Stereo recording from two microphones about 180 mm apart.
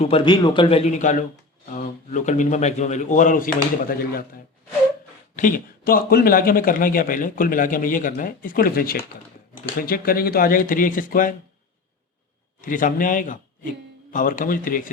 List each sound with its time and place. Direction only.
0.0 s a man's voice: 30° left (ahead or behind); by 4.3 s 55° left (ahead or behind)
5.4 s a man's voice: 50° left (ahead or behind)
12.6 s a man's voice: 45° left (ahead or behind)